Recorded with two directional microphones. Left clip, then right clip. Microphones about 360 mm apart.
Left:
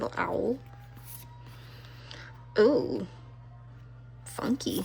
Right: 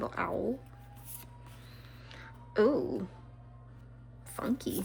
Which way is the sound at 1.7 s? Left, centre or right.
Centre.